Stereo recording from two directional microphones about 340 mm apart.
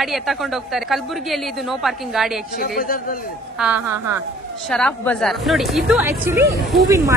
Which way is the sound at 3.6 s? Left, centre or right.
Centre.